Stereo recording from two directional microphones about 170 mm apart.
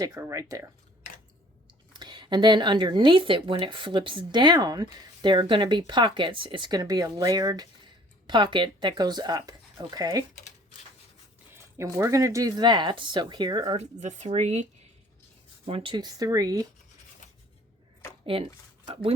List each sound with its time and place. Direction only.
0.0 s speech: 20° right (ahead or behind)
2.0 s speech: 25° right (ahead or behind)
11.5 s speech: 15° right (ahead or behind)
13.7 s speech: 45° right (ahead or behind); by 16.6 s 20° right (ahead or behind)
18.3 s speech: 30° right (ahead or behind)